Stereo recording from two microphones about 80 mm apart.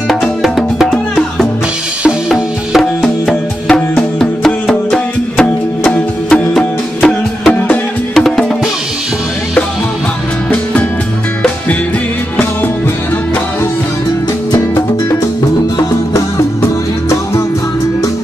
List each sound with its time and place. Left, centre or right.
0.1 s music: centre
10.5 s music: centre
16.1 s music: left